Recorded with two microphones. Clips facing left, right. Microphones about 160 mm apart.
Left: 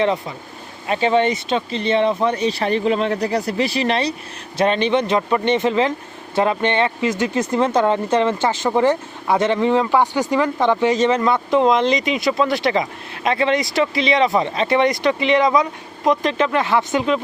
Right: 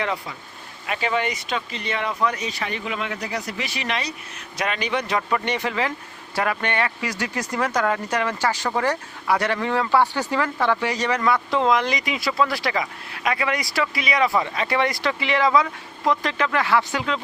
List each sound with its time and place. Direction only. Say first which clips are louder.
0.0 s speech: left 8 dB; 25° left (ahead or behind)